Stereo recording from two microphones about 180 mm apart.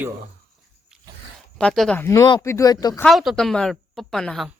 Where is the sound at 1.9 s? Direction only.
15° left (ahead or behind).